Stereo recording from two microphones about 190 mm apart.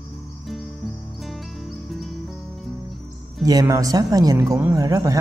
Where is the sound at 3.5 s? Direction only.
20° right (ahead or behind).